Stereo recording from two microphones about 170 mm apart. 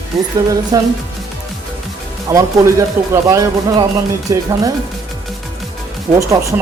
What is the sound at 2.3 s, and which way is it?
A man's voice, 20° right (ahead or behind).